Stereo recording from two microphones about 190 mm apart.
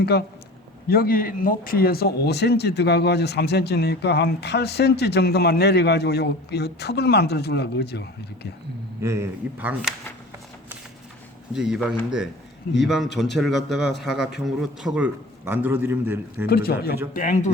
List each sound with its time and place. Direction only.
0.0 s speech: 60° left (ahead or behind)
9.0 s a man's voice: 15° right (ahead or behind)
11.5 s a man's voice: 5° right (ahead or behind)
16.5 s speech: 55° left (ahead or behind)